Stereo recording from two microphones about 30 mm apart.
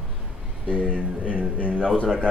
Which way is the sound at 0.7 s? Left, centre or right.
Left.